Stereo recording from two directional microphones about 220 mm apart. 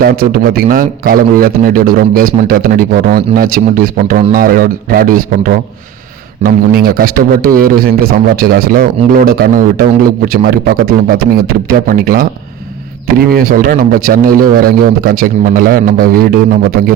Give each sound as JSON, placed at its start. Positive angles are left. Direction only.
{"t": 0.0, "sound": "a man's voice", "side_deg": -40}